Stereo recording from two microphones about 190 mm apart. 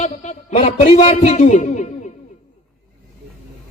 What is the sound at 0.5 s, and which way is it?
A man's voice, 30° left (ahead or behind).